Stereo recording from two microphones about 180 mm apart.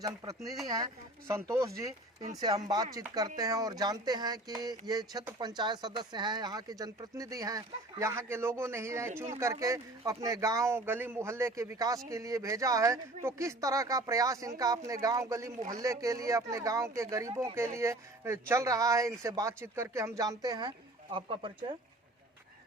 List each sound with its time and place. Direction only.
1.3 s speech: 15° right (ahead or behind)